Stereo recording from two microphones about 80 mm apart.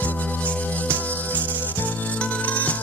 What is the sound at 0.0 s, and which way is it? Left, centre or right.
Music, centre.